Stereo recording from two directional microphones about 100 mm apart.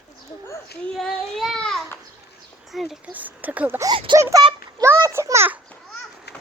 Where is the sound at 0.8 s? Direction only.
5° left (ahead or behind).